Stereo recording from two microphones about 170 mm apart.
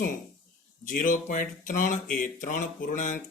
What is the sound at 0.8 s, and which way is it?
Speech, 55° left (ahead or behind).